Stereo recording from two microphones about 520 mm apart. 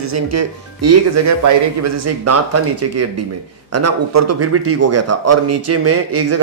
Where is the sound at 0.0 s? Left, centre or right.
Right.